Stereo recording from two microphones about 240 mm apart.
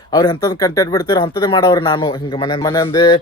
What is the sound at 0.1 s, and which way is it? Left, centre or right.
Speech, centre.